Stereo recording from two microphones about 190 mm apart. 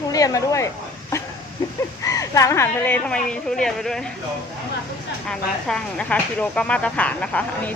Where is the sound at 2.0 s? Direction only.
15° left (ahead or behind); by 4.0 s centre (ahead or behind).